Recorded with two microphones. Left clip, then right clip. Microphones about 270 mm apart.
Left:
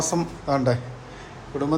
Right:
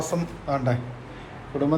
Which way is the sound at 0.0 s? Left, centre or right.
Centre.